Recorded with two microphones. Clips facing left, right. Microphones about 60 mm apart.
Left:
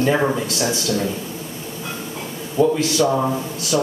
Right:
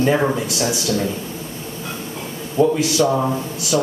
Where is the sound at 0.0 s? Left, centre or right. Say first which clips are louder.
Right 1 dB; centre.